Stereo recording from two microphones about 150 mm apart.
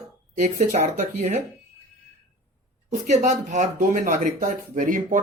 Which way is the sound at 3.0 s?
55° right (ahead or behind).